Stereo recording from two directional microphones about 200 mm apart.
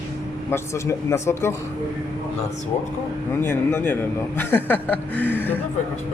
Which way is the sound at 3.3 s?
10° left (ahead or behind).